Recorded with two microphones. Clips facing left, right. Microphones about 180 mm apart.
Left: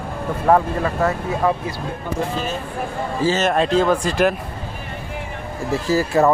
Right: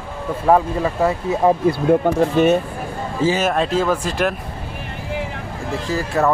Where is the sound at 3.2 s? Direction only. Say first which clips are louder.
Even; 10° right (ahead or behind).